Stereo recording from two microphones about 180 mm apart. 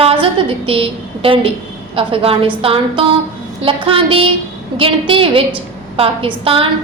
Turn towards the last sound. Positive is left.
turn(degrees=-30)  # may be behind; listen again after turning